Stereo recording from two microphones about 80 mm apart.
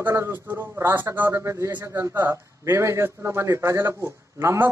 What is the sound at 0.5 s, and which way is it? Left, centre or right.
A man's voice, right.